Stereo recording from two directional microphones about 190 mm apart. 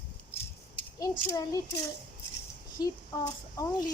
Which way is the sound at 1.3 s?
20° left (ahead or behind).